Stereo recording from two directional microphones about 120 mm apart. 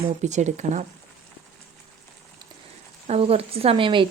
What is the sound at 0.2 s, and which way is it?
Speech, 80° right.